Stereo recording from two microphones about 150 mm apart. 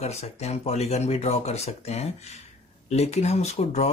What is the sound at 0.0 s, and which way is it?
Speech, 45° left (ahead or behind).